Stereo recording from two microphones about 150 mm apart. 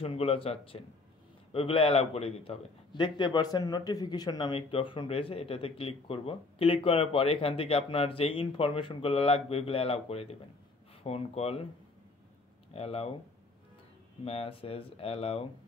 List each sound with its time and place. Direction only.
0.0 s a man's voice: 40° left (ahead or behind)
2.9 s a man's voice: 30° left (ahead or behind)
12.7 s a man's voice: 40° left (ahead or behind)
14.2 s a man's voice: 40° left (ahead or behind)